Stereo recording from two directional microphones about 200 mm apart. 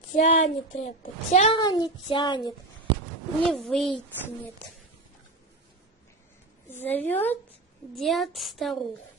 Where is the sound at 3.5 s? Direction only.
Centre (ahead or behind).